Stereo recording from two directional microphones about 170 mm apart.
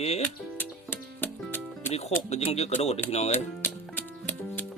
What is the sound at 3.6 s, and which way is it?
Music, 10° left (ahead or behind).